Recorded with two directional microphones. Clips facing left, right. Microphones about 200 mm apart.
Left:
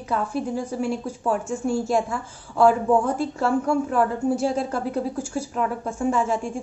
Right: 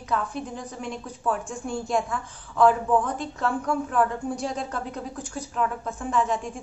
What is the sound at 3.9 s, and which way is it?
A woman's voice, 5° left (ahead or behind).